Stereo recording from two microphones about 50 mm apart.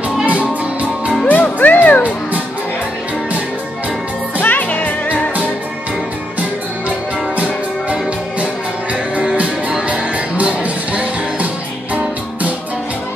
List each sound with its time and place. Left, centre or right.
0.2 s music: right
1.2 s music: left
4.4 s music: left
9.4 s music: right